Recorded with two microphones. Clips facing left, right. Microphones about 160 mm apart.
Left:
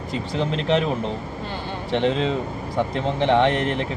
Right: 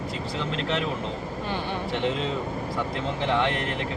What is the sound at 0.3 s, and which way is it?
Speech, 40° left (ahead or behind).